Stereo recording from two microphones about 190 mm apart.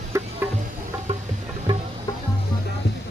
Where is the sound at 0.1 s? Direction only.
15° right (ahead or behind).